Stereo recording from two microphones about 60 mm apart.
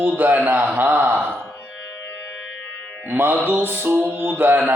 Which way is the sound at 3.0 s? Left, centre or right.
Right.